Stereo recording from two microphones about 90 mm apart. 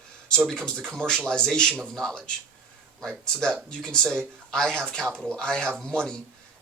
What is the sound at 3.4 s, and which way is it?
Speech, 5° left (ahead or behind).